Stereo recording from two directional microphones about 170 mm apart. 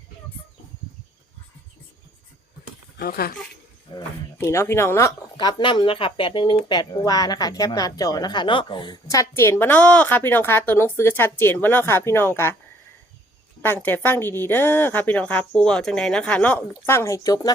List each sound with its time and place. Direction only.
3.0 s speech: 65° left (ahead or behind)
3.9 s speech: 15° left (ahead or behind)
13.6 s speech: 10° left (ahead or behind)